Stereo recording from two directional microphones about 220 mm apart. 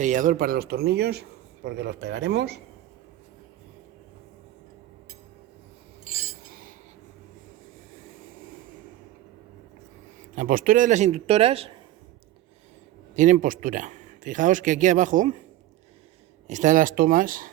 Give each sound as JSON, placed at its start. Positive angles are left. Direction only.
{"t": 0.0, "sound": "a man's voice", "side_deg": -35}
{"t": 6.1, "sound": "cutlery", "side_deg": -40}
{"t": 10.3, "sound": "speech", "side_deg": -40}
{"t": 13.1, "sound": "speech", "side_deg": -35}
{"t": 16.5, "sound": "speech", "side_deg": -35}